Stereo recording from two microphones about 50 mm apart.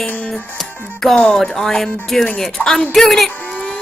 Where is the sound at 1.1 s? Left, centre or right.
Centre.